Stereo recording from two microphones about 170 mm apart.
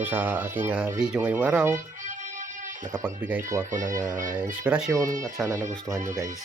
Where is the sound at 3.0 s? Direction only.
10° right (ahead or behind).